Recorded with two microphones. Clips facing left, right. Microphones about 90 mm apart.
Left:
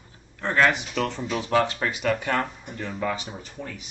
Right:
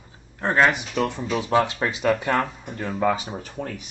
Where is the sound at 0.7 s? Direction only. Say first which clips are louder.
Right 2 dB; 15° right (ahead or behind).